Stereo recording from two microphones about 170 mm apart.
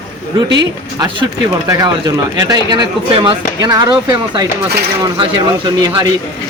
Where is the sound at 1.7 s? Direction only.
20° right (ahead or behind).